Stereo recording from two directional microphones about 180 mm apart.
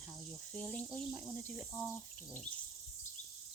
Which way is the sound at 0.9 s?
Centre (ahead or behind).